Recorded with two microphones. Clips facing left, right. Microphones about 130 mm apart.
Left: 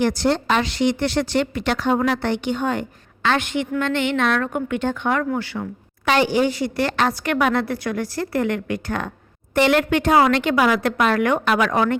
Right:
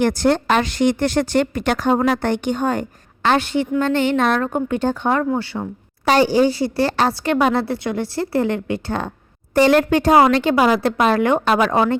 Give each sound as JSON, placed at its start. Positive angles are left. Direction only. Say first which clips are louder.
{"t": 0.0, "sound": "a woman's voice", "louder": "right 3 dB", "side_deg": -50}